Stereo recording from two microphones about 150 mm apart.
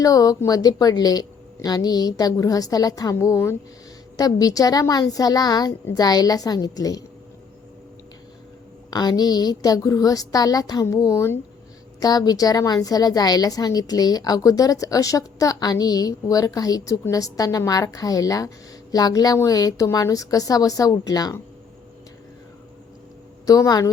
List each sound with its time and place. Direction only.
0.0 s a woman's voice: 25° left (ahead or behind)
8.9 s a woman's voice: 25° left (ahead or behind)
23.5 s a woman's voice: 25° left (ahead or behind)